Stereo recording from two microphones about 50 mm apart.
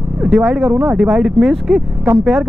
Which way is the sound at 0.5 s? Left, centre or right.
Centre.